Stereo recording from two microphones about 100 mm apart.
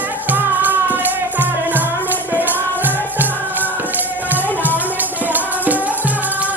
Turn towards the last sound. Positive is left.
turn(degrees=-15)  # may be behind; listen again after turning